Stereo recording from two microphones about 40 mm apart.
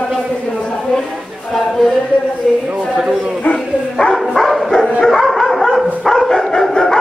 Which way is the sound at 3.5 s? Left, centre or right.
Left.